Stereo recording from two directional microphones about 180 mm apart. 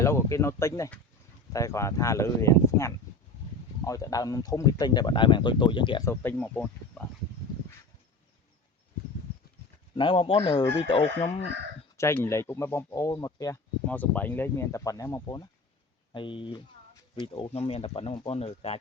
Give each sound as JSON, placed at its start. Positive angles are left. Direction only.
{"t": 0.0, "sound": "speech", "side_deg": 15}
{"t": 6.1, "sound": "speech", "side_deg": 10}
{"t": 9.9, "sound": "speech", "side_deg": 25}
{"t": 11.9, "sound": "speech", "side_deg": 15}